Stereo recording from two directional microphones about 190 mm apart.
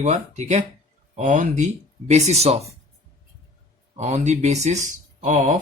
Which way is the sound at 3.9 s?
35° right (ahead or behind).